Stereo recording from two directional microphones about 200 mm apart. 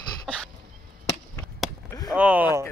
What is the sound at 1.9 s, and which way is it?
Chop, 15° left (ahead or behind).